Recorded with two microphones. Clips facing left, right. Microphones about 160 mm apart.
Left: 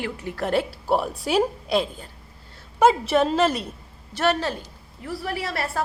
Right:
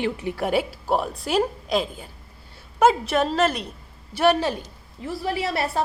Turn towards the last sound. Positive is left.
turn(degrees=-20)  # may be behind; listen again after turning